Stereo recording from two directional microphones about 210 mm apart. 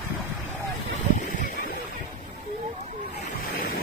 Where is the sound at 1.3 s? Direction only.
35° left (ahead or behind).